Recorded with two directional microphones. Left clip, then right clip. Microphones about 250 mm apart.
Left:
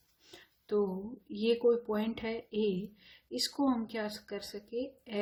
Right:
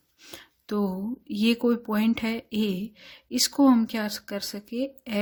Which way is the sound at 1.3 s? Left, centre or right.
Right.